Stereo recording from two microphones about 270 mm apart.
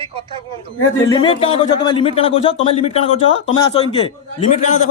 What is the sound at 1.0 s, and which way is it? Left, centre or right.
A man's voice, centre.